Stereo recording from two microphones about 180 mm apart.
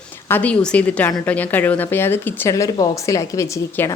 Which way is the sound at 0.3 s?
10° left (ahead or behind).